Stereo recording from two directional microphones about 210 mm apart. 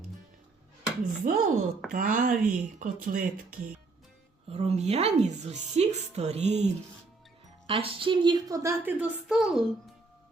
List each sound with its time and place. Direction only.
1.2 s a woman's voice: 40° right (ahead or behind); by 9.9 s centre (ahead or behind)